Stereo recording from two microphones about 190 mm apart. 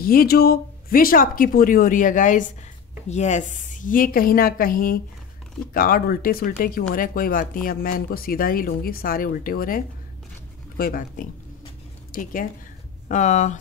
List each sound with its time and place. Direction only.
0.0 s speech: 50° left (ahead or behind)